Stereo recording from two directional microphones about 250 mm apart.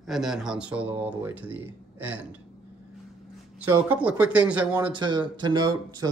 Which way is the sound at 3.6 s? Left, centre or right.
Centre.